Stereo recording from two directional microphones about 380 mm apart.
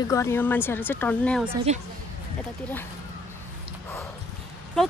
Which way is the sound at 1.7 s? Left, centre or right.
Centre.